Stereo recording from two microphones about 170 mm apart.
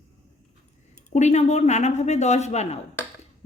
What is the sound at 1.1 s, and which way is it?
Speech, 40° left (ahead or behind).